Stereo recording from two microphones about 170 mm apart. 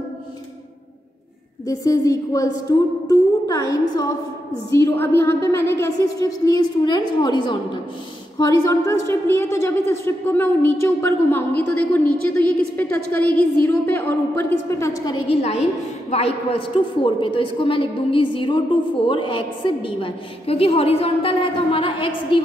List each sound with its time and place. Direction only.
1.7 s a woman's voice: 20° left (ahead or behind)
15.2 s a woman's voice: 40° left (ahead or behind)